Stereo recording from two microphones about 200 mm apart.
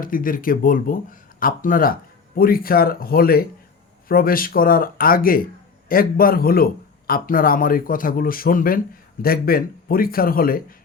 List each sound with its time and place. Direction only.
0.0 s speech: 45° left (ahead or behind)